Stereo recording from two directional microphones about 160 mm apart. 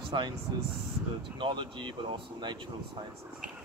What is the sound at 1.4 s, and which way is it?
Speech, 30° right (ahead or behind).